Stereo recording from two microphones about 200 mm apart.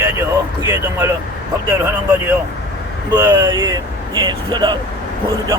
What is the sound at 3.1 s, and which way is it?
Speech, 20° right (ahead or behind).